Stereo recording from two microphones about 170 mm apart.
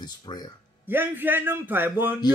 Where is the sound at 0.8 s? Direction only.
10° right (ahead or behind).